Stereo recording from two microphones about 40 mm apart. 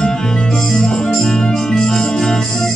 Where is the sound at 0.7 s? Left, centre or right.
Centre.